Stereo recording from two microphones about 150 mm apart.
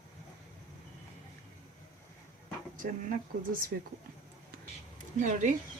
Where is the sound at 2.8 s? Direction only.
65° right (ahead or behind).